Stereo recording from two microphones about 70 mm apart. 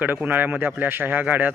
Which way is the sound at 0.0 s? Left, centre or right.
Right.